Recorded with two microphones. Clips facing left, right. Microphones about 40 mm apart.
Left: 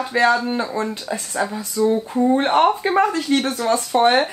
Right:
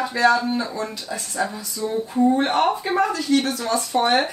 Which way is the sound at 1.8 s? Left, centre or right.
Centre.